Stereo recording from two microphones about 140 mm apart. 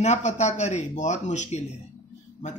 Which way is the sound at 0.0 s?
60° left (ahead or behind).